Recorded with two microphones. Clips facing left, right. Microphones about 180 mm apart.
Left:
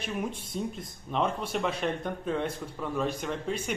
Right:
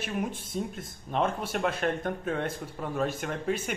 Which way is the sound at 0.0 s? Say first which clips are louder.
Right 1 dB; centre (ahead or behind).